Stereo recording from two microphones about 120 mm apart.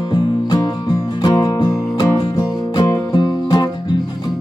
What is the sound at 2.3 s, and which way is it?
Music, 30° left (ahead or behind).